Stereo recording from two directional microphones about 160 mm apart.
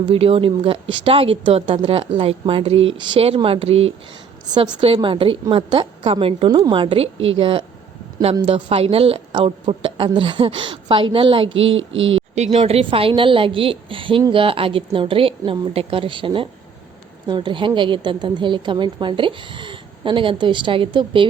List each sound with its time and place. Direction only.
0.0 s speech: 35° right (ahead or behind)
4.5 s speech: 30° right (ahead or behind)